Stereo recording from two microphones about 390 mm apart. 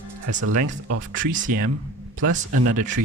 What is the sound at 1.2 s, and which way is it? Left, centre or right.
Speech, centre.